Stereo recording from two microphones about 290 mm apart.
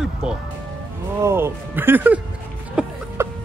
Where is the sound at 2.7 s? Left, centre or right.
Centre.